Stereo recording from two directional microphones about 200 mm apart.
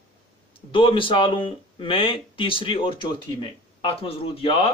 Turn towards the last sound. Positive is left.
turn(degrees=30)  # may be behind; listen again after turning